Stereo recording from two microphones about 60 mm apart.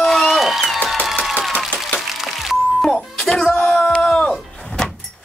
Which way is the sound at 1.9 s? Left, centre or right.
Centre.